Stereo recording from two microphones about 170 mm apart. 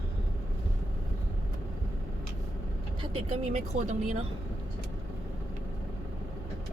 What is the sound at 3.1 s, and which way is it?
Speech, 40° right (ahead or behind).